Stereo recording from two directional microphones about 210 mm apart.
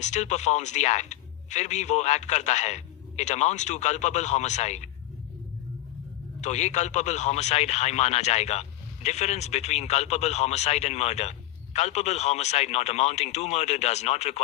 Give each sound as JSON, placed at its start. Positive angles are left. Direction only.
{"t": 0.0, "sound": "speech", "side_deg": 35}
{"t": 6.4, "sound": "speech", "side_deg": 35}